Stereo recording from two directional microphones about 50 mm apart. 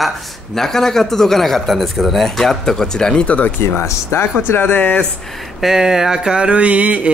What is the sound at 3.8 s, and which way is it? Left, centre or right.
Speech, left.